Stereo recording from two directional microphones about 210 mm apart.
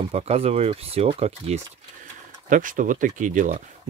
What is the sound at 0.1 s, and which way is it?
Speech, 30° right (ahead or behind).